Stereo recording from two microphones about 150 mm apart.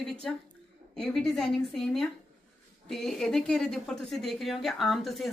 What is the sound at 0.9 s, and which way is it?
A woman's voice, 5° left (ahead or behind).